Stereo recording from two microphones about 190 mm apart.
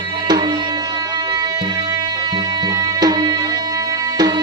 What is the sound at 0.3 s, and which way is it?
Music, 20° right (ahead or behind).